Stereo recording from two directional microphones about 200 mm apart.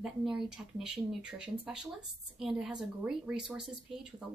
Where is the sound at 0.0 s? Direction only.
Centre (ahead or behind).